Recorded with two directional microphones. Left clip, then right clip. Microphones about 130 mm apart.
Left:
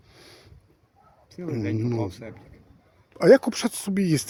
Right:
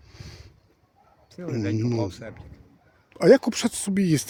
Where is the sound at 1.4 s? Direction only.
25° right (ahead or behind).